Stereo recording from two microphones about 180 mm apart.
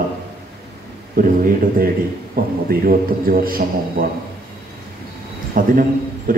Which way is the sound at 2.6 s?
55° right (ahead or behind).